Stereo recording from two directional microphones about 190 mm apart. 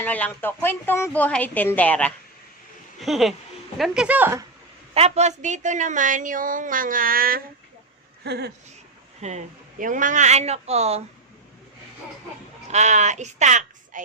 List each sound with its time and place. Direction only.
0.0 s a woman's voice: 10° left (ahead or behind); by 4.4 s 10° right (ahead or behind)
4.9 s a woman's voice: 35° right (ahead or behind); by 7.4 s 50° right (ahead or behind)
8.2 s speech: 60° right (ahead or behind)
9.2 s speech: 40° right (ahead or behind)
12.6 s speech: 35° right (ahead or behind)